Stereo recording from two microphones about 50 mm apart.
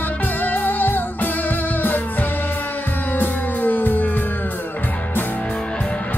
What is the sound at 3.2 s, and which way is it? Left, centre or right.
Music, left.